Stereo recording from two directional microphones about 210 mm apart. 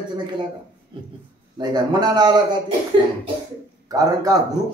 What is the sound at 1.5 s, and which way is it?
Speech, 20° right (ahead or behind).